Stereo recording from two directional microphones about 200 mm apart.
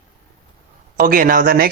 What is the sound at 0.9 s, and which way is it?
Speech, 45° right (ahead or behind).